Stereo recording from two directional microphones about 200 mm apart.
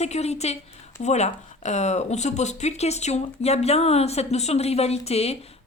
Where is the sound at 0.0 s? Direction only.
35° left (ahead or behind).